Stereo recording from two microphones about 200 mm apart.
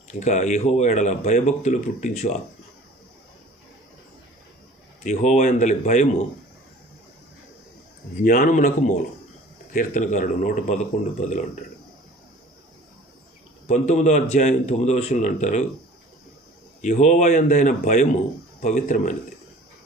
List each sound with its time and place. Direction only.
0.1 s speech: 35° left (ahead or behind)
5.0 s speech: 35° left (ahead or behind)
8.2 s speech: 40° left (ahead or behind)
13.7 s speech: 35° left (ahead or behind)
16.8 s speech: 35° left (ahead or behind)